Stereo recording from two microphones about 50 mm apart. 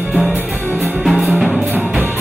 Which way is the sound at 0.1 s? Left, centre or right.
Centre.